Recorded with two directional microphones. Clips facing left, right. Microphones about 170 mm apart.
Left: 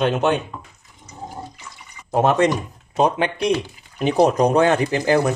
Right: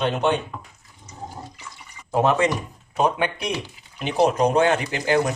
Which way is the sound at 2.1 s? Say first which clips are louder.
Left 3 dB; 45° left (ahead or behind).